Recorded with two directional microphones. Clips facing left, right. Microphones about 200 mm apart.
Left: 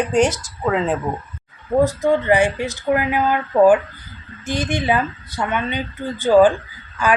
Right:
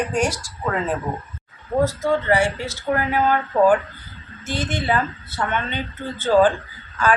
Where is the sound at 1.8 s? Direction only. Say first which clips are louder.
Left 2 dB; 15° left (ahead or behind).